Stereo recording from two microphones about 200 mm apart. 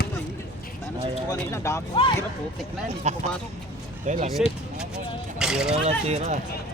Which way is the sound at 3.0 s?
35° right (ahead or behind).